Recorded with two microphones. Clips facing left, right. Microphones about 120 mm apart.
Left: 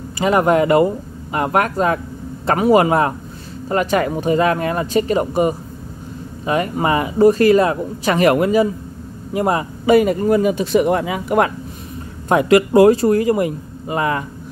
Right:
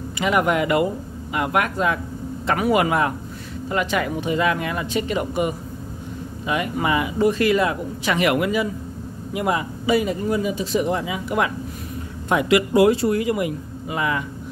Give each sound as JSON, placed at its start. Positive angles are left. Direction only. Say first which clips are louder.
{"t": 0.2, "sound": "speech", "louder": "left 5 dB", "side_deg": 35}